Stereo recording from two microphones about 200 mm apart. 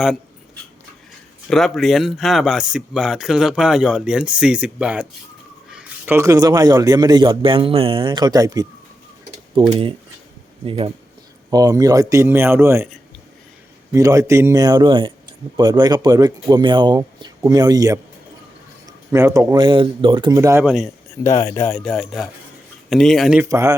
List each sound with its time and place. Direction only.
1.5 s a man's voice: centre (ahead or behind)
13.9 s a man's voice: 15° right (ahead or behind)
20.7 s speech: centre (ahead or behind)
21.2 s speech: 15° left (ahead or behind)
21.9 s speech: centre (ahead or behind)
23.4 s speech: 15° right (ahead or behind)